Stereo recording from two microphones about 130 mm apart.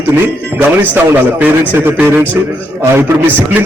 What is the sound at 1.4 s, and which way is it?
Speech, 15° right (ahead or behind).